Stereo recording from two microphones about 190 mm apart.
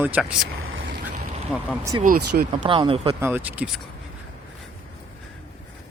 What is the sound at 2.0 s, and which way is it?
Speech, 50° right (ahead or behind).